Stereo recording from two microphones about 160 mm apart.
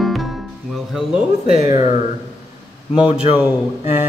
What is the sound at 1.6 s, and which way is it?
Speech, 25° right (ahead or behind).